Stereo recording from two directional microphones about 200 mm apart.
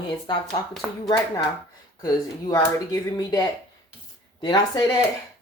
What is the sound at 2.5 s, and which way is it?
Speech, 20° left (ahead or behind).